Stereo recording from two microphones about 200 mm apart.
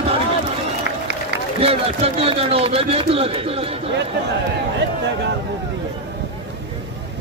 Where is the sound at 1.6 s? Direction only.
30° right (ahead or behind).